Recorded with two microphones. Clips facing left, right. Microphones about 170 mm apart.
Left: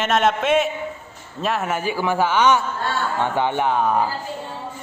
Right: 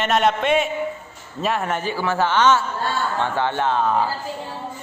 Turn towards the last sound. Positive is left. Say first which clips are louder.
# left 1 dB
turn(degrees=10)  # may be behind; listen again after turning